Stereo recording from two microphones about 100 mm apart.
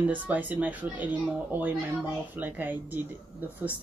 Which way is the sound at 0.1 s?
15° right (ahead or behind).